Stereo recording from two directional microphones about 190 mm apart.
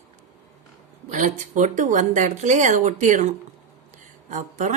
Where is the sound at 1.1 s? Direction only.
45° right (ahead or behind).